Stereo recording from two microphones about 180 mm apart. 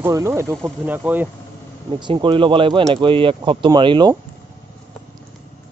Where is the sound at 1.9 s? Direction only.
25° right (ahead or behind).